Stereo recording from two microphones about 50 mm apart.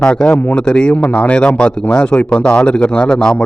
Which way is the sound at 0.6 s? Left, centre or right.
Centre.